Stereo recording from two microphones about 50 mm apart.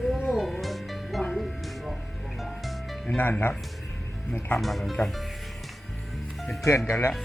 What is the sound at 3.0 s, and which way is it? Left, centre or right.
Speech, left.